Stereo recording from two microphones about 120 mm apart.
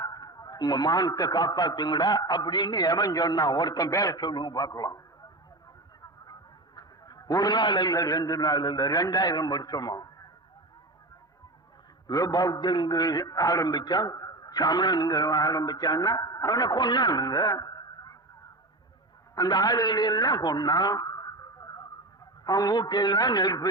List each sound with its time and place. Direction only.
0.0 s a man's voice: 30° left (ahead or behind)
6.7 s a man's voice: 30° left (ahead or behind)
12.0 s a man's voice: 30° left (ahead or behind)
19.4 s a man's voice: 35° left (ahead or behind)